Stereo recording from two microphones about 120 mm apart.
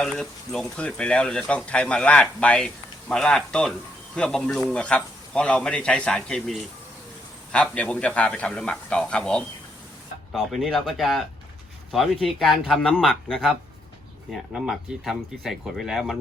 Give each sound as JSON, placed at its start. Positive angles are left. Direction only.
{"t": 0.0, "sound": "speech", "side_deg": 5}